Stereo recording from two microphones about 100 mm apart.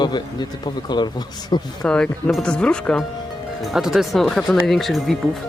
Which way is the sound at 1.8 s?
10° left (ahead or behind).